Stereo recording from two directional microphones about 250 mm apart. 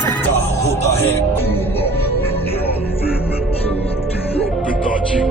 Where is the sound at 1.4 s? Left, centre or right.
Left.